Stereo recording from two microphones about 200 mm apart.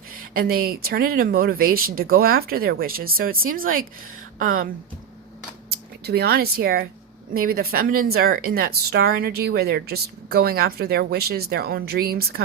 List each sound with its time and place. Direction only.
0.1 s speech: 50° right (ahead or behind)
4.4 s speech: 90° right
6.1 s speech: 50° right (ahead or behind)